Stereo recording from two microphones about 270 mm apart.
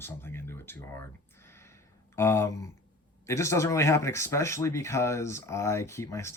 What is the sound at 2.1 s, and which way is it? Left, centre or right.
Speech, centre.